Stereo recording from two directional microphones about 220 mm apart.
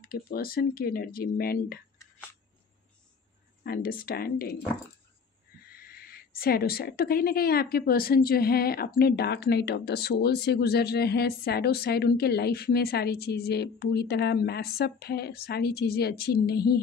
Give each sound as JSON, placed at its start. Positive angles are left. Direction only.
{"t": 0.0, "sound": "speech", "side_deg": 40}
{"t": 3.6, "sound": "a woman's voice", "side_deg": 45}
{"t": 5.8, "sound": "a woman's voice", "side_deg": 45}